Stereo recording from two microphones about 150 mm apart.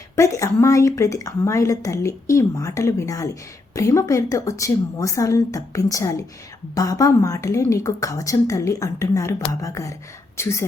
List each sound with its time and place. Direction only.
0.2 s a woman's voice: 20° left (ahead or behind)